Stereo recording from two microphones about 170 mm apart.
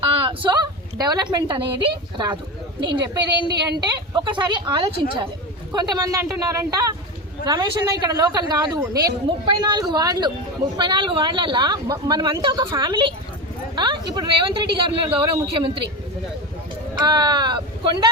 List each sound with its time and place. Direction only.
0.0 s a woman's voice: 30° right (ahead or behind)
4.1 s speech: 25° right (ahead or behind)
17.1 s speech: 25° right (ahead or behind)